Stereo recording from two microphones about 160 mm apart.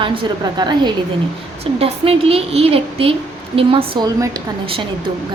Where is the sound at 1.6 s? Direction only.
35° right (ahead or behind).